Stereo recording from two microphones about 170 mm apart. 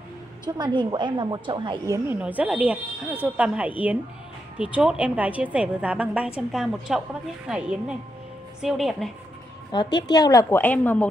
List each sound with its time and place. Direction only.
0.5 s a woman's voice: 25° right (ahead or behind)
2.0 s a woman's voice: 10° right (ahead or behind)
9.9 s a woman's voice: 25° left (ahead or behind); by 11.1 s 10° left (ahead or behind)